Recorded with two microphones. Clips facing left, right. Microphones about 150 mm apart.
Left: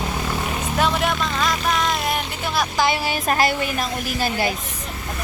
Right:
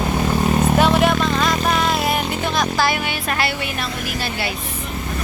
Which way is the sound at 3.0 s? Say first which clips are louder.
Left 2 dB; 40° left (ahead or behind).